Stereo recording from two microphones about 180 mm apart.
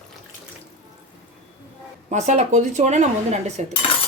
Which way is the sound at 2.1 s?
40° right (ahead or behind).